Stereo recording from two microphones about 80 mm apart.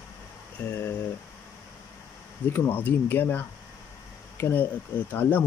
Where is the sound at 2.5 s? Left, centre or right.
Left.